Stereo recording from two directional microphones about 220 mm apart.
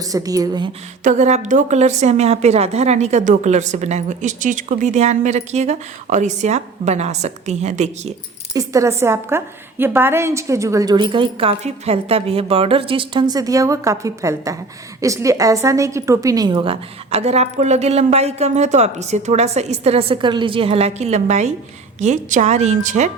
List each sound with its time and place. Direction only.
0.1 s a woman's voice: 15° right (ahead or behind)
1.0 s a woman's voice: 30° right (ahead or behind)
8.5 s a woman's voice: 15° right (ahead or behind); by 23.0 s 35° right (ahead or behind)